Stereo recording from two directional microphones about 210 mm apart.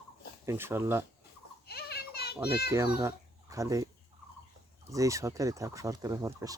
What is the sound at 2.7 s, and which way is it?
Speech, 15° right (ahead or behind).